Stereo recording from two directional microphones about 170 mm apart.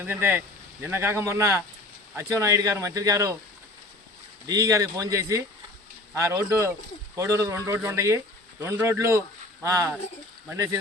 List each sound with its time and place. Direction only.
0.0 s speech: 10° right (ahead or behind)
4.4 s speech: 20° right (ahead or behind)